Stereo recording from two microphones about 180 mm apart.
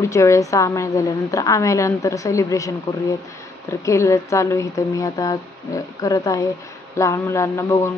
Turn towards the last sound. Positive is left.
turn(degrees=15)  # may be behind; listen again after turning